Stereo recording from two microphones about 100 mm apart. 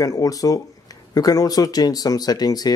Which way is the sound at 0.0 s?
35° left (ahead or behind).